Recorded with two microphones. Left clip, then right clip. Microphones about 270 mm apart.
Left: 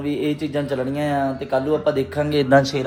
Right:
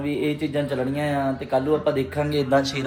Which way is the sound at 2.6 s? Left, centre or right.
Left.